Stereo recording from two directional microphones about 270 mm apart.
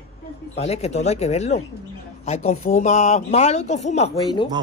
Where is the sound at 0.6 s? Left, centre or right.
Left.